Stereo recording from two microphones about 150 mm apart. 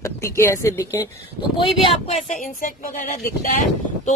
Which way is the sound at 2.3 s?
65° left (ahead or behind).